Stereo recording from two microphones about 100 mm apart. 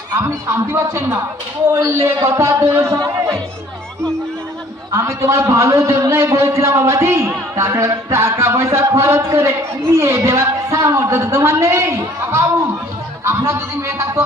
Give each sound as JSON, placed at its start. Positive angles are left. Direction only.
{"t": 0.7, "sound": "a man's voice", "side_deg": -25}
{"t": 4.9, "sound": "a man's voice", "side_deg": -30}